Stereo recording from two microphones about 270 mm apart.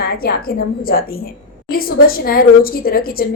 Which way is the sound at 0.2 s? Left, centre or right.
Left.